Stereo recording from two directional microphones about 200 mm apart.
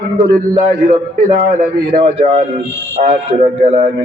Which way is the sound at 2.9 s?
30° right (ahead or behind).